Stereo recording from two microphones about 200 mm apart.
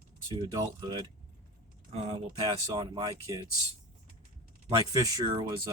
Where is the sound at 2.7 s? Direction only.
25° right (ahead or behind).